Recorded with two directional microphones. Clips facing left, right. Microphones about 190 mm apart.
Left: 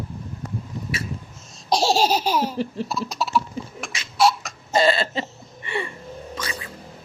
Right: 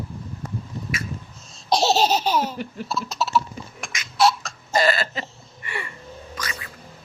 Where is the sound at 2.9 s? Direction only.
15° left (ahead or behind).